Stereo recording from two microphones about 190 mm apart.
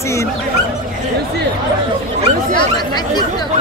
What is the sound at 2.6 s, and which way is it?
Speech, 20° left (ahead or behind).